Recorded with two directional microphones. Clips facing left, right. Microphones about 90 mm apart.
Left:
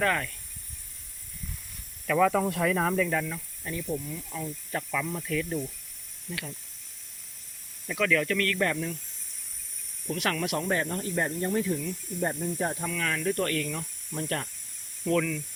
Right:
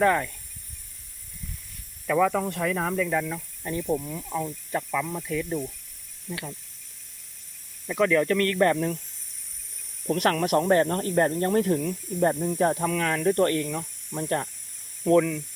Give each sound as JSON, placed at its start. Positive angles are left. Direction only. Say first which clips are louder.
{"t": 0.0, "sound": "speech", "louder": "right 5 dB", "side_deg": -20}
{"t": 2.0, "sound": "speech", "louder": "right 1 dB", "side_deg": -5}
{"t": 3.6, "sound": "speech", "louder": "right 6 dB", "side_deg": -25}
{"t": 6.3, "sound": "speech", "louder": "right 3 dB", "side_deg": -25}
{"t": 7.9, "sound": "speech", "louder": "right 5 dB", "side_deg": -30}
{"t": 10.1, "sound": "speech", "louder": "right 7 dB", "side_deg": -45}
{"t": 13.0, "sound": "speech", "louder": "right 5 dB", "side_deg": -35}